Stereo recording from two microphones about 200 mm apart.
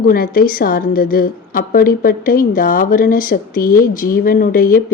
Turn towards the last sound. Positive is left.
turn(degrees=45)  # may be behind; listen again after turning